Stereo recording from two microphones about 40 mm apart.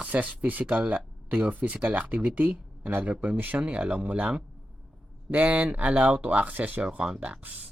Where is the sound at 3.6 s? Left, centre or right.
Right.